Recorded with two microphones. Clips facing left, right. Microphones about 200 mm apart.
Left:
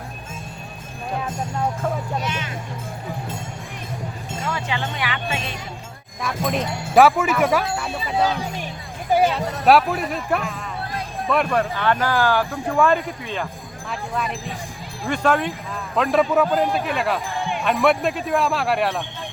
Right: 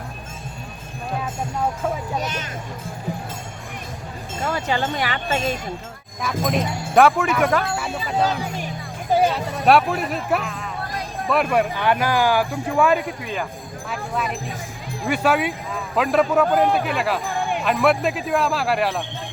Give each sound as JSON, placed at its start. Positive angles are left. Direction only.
{"t": 2.2, "sound": "speech", "side_deg": -45}
{"t": 4.4, "sound": "speech", "side_deg": -40}
{"t": 6.2, "sound": "speech", "side_deg": 0}
{"t": 9.3, "sound": "speech", "side_deg": 0}
{"t": 15.0, "sound": "speech", "side_deg": -5}
{"t": 16.6, "sound": "speech", "side_deg": -55}
{"t": 16.8, "sound": "speech", "side_deg": 0}